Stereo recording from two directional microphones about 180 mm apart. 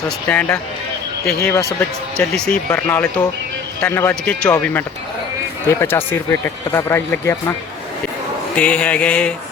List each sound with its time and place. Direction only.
0.3 s speech: 10° left (ahead or behind)
2.1 s speech: 5° left (ahead or behind)
8.5 s speech: 5° left (ahead or behind)